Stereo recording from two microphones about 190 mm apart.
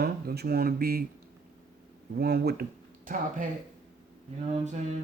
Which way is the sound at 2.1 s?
55° right (ahead or behind).